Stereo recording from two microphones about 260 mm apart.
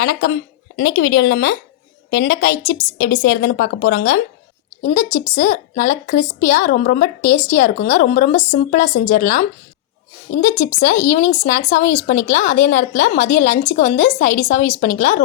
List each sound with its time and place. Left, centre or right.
0.0 s a woman's voice: left
4.8 s a woman's voice: left
10.4 s a woman's voice: left